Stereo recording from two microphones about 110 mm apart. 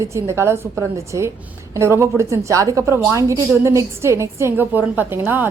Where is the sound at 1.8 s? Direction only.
25° right (ahead or behind).